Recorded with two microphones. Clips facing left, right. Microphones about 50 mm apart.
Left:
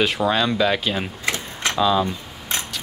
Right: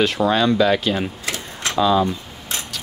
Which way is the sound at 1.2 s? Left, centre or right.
Left.